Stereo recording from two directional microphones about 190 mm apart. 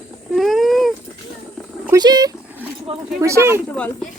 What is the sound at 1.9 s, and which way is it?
Speech, 20° right (ahead or behind).